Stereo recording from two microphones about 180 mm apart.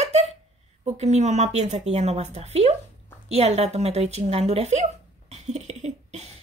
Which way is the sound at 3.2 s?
35° right (ahead or behind).